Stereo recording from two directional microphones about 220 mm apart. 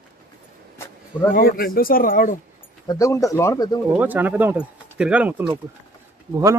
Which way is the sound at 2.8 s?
15° left (ahead or behind).